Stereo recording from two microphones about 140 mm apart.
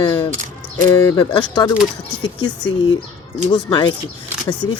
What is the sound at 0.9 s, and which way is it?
Speech, 25° left (ahead or behind).